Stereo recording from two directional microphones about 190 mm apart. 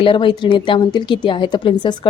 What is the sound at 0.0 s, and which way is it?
A woman's voice, 25° left (ahead or behind).